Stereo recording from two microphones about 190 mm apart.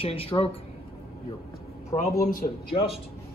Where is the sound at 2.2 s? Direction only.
45° left (ahead or behind).